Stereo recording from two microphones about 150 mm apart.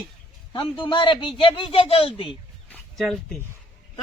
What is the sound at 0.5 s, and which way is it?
A man's voice, 35° left (ahead or behind).